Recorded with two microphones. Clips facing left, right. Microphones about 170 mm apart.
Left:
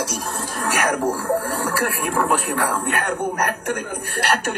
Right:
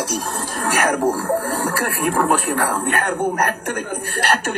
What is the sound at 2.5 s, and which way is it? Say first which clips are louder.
A man's voice: right 2 dB; 30° right (ahead or behind).